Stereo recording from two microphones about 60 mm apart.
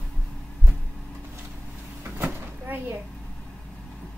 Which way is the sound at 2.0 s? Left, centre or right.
Right.